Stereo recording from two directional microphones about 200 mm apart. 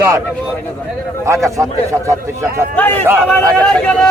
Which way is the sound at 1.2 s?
15° right (ahead or behind).